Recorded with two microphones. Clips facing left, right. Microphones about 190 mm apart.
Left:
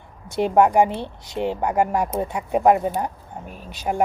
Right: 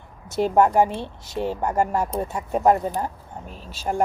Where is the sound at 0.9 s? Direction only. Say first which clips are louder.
Left 1 dB; 20° left (ahead or behind).